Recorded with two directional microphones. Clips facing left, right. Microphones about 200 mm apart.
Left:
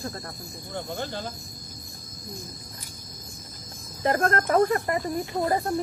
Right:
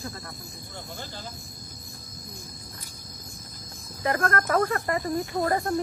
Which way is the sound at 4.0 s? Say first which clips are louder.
Left 2 dB; 25° left (ahead or behind).